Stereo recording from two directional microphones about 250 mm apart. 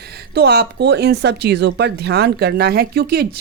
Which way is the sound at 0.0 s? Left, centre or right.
Right.